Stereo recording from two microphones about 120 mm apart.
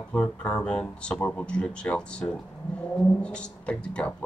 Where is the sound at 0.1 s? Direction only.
10° left (ahead or behind).